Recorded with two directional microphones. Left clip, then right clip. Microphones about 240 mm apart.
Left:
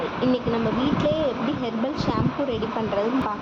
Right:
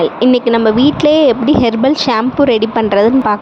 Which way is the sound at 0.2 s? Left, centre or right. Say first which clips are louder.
Right 13 dB; right.